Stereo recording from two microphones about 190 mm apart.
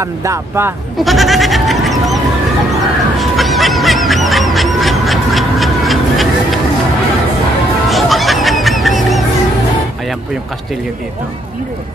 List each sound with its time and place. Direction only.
0.0 s speech: 15° right (ahead or behind)
0.9 s goat: centre (ahead or behind)
3.2 s goose: centre (ahead or behind)
7.9 s music: centre (ahead or behind)